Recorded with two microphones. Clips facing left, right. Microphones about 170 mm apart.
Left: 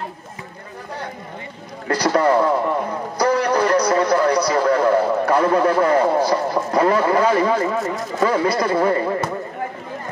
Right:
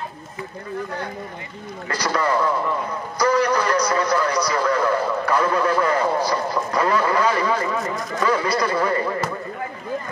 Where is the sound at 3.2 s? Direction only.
55° left (ahead or behind).